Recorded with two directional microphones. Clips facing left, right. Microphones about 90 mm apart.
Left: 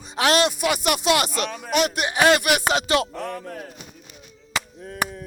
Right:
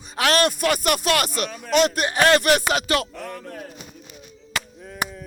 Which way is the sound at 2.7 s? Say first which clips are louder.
Left 1 dB; 25° left (ahead or behind).